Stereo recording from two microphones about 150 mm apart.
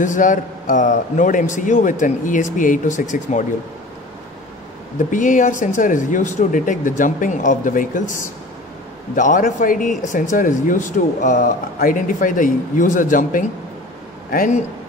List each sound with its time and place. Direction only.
0.0 s speech: 55° left (ahead or behind)
5.1 s speech: 60° left (ahead or behind)